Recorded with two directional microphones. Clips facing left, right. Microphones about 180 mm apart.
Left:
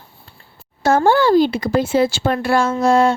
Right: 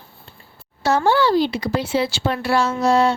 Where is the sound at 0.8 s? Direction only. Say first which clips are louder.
Left 3 dB; 50° left (ahead or behind).